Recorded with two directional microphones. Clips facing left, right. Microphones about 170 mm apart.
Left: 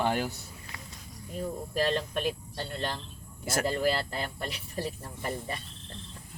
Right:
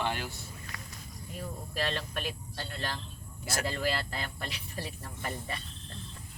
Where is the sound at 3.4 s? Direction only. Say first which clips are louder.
Left 5 dB; 50° left (ahead or behind).